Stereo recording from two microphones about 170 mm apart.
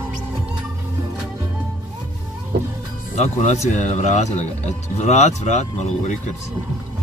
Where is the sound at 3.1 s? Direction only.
40° left (ahead or behind).